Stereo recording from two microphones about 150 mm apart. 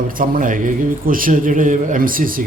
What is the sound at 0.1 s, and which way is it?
A man's voice, 65° right (ahead or behind).